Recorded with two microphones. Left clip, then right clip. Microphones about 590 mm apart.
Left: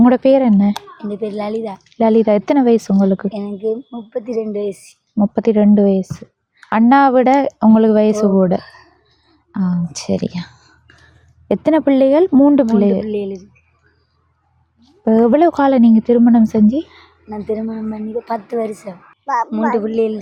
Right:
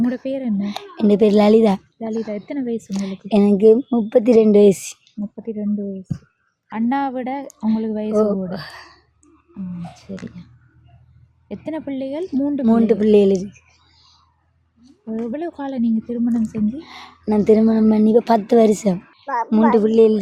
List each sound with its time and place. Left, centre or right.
0.0 s speech: left
0.9 s a woman's voice: right
2.0 s speech: left
3.2 s a woman's voice: right
5.3 s a woman's voice: left
8.5 s speech: right
9.9 s speech: left
12.7 s speech: right
15.2 s speech: left
16.9 s a woman's voice: right
19.2 s a woman's voice: right
19.5 s a woman's voice: right